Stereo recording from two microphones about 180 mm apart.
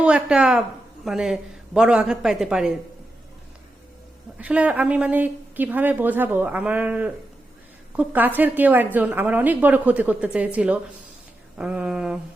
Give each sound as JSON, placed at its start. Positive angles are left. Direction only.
{"t": 0.0, "sound": "a woman's voice", "side_deg": -5}
{"t": 4.4, "sound": "speech", "side_deg": -5}